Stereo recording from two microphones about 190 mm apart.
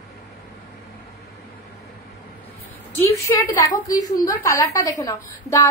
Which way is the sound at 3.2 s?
15° left (ahead or behind).